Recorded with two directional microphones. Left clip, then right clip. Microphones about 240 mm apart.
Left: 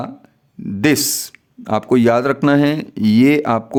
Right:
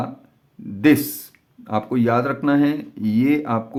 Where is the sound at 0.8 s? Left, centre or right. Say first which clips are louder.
Left 1 dB; left.